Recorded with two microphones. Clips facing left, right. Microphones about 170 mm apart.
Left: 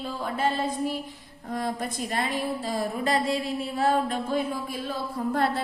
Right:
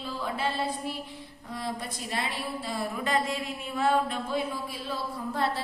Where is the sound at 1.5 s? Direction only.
50° left (ahead or behind).